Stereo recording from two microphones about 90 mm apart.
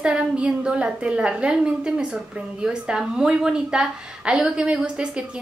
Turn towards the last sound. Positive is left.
turn(degrees=-10)  # may be behind; listen again after turning